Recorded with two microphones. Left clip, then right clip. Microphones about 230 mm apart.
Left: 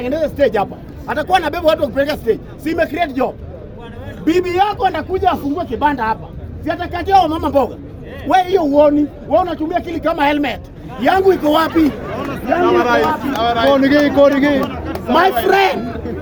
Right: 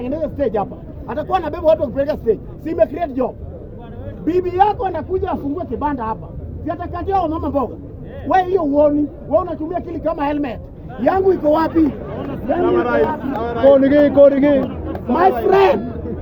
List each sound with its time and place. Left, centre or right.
0.0 s a man's voice: centre
4.3 s a man's voice: centre
12.6 s speech: right
15.1 s a man's voice: centre